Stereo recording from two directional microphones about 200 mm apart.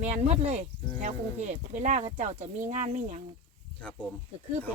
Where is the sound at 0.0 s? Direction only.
35° right (ahead or behind).